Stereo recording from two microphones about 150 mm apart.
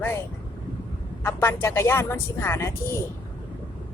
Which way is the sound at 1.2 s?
15° left (ahead or behind).